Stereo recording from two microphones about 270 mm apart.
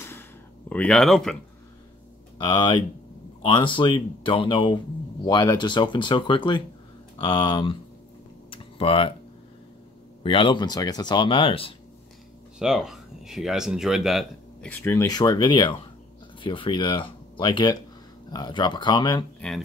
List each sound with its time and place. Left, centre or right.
0.7 s speech: centre
2.3 s speech: centre
8.5 s typing: centre
10.2 s speech: centre
12.5 s speech: centre